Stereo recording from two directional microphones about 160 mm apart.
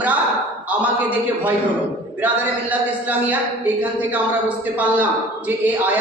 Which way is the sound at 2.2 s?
10° right (ahead or behind).